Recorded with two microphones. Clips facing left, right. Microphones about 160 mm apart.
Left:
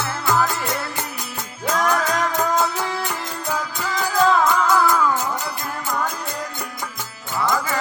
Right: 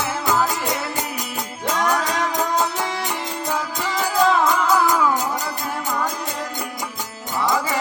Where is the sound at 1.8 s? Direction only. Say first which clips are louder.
Left 1 dB; 10° right (ahead or behind).